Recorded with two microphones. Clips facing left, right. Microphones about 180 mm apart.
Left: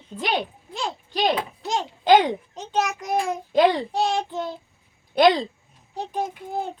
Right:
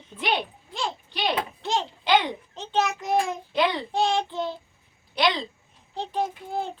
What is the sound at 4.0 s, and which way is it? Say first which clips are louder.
Child singing: right 2 dB; centre (ahead or behind).